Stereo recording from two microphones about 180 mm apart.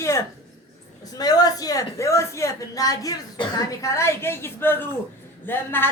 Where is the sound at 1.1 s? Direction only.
20° left (ahead or behind).